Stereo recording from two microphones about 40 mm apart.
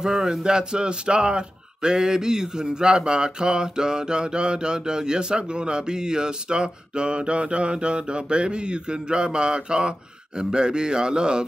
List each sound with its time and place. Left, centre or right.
0.0 s speech: centre